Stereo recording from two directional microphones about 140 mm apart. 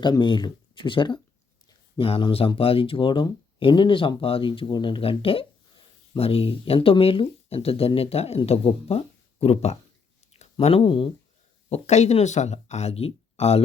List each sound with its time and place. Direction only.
0.0 s speech: 35° left (ahead or behind)
11.7 s speech: 55° left (ahead or behind)